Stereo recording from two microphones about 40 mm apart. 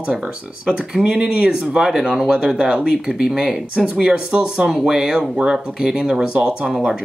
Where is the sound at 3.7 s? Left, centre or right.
Right.